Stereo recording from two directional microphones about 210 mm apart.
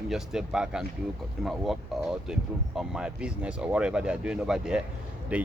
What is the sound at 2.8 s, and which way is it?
Speech, 5° right (ahead or behind).